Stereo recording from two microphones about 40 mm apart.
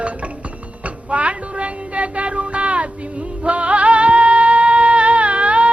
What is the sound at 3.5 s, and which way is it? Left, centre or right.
Music, right.